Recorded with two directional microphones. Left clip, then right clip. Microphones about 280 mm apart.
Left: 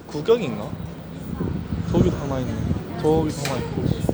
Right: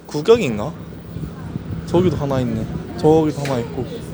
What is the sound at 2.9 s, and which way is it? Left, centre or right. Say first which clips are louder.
Speech: right 6 dB; right.